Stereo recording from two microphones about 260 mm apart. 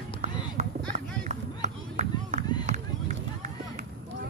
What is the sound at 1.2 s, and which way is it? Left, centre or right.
Run, right.